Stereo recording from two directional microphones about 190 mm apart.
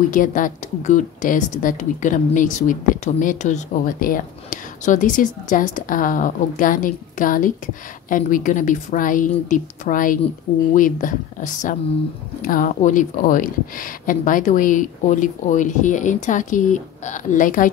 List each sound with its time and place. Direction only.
0.1 s a woman's voice: 45° left (ahead or behind)